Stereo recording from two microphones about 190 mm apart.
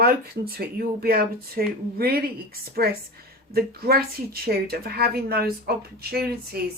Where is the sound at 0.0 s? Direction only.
55° right (ahead or behind).